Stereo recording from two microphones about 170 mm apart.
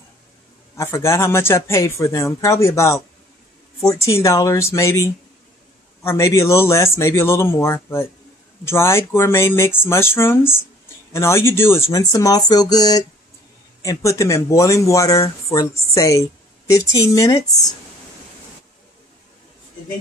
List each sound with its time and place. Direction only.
0.7 s speech: 15° left (ahead or behind)
4.2 s a woman's voice: 20° left (ahead or behind)